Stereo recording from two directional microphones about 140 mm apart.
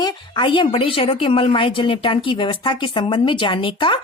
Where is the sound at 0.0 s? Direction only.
30° left (ahead or behind).